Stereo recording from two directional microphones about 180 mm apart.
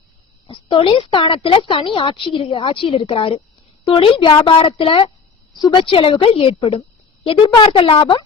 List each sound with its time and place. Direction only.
0.4 s a woman's voice: 25° left (ahead or behind)